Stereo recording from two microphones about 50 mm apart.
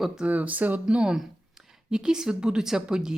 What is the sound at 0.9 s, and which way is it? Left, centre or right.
Speech, centre.